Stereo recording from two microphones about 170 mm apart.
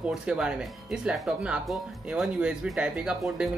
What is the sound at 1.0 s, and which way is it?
Speech, 5° right (ahead or behind).